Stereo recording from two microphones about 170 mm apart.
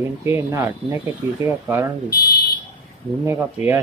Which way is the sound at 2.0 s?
65° left (ahead or behind).